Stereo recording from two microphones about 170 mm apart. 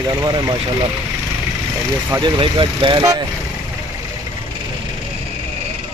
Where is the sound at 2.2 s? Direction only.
30° right (ahead or behind).